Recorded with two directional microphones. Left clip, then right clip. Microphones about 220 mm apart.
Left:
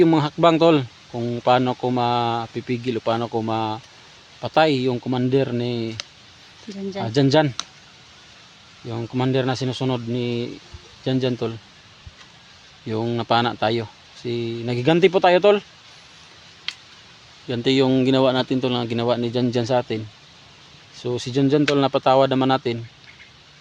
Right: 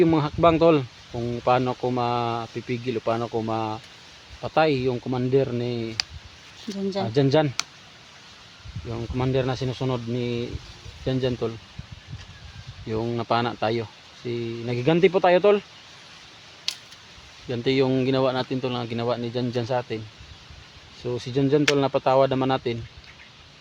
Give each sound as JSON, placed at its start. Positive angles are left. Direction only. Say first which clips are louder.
{"t": 0.0, "sound": "speech", "louder": "left 3 dB", "side_deg": 55}
{"t": 6.7, "sound": "speech", "louder": "right 2 dB", "side_deg": -25}
{"t": 7.1, "sound": "speech", "louder": "left 4 dB", "side_deg": 55}
{"t": 8.9, "sound": "speech", "louder": "left 3 dB", "side_deg": 55}
{"t": 12.9, "sound": "speech", "louder": "left 4 dB", "side_deg": 55}
{"t": 17.5, "sound": "speech", "louder": "left 3 dB", "side_deg": 55}
{"t": 21.0, "sound": "speech", "louder": "left 3 dB", "side_deg": 50}